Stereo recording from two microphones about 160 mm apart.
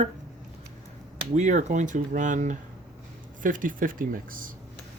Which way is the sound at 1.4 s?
50° right (ahead or behind).